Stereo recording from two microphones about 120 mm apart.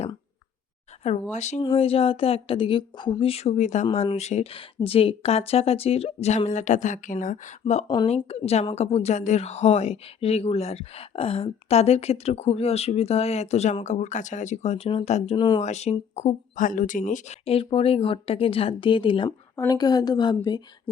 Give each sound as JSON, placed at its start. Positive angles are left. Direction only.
{"t": 1.3, "sound": "speech", "side_deg": 75}
{"t": 1.6, "sound": "speech", "side_deg": 55}
{"t": 3.9, "sound": "speech", "side_deg": 60}
{"t": 6.5, "sound": "speech", "side_deg": 90}
{"t": 7.6, "sound": "speech", "side_deg": 65}
{"t": 13.8, "sound": "speech", "side_deg": 80}
{"t": 15.4, "sound": "a woman's voice", "side_deg": 35}
{"t": 15.6, "sound": "speech", "side_deg": 70}
{"t": 19.5, "sound": "a woman's voice", "side_deg": 30}